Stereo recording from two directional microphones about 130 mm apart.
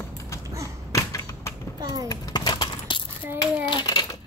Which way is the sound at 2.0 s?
30° left (ahead or behind).